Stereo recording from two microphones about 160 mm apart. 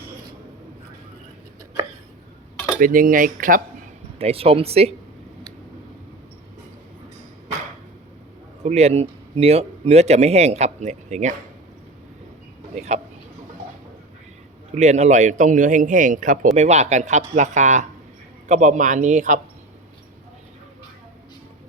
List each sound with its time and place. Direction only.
2.7 s cutlery: 60° right (ahead or behind)
4.2 s speech: 35° right (ahead or behind)
8.6 s speech: 40° right (ahead or behind)
12.7 s a man's voice: 45° right (ahead or behind)
14.8 s a man's voice: 45° right (ahead or behind)
16.6 s a man's voice: 45° right (ahead or behind)